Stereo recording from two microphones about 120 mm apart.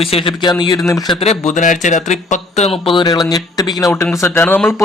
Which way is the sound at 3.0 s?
35° left (ahead or behind).